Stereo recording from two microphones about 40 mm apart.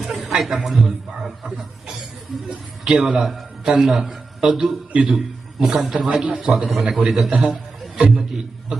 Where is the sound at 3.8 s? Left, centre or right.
Centre.